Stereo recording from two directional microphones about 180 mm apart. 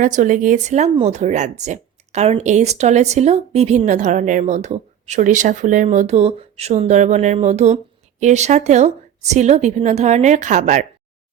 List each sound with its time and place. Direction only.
0.0 s speech: 45° right (ahead or behind)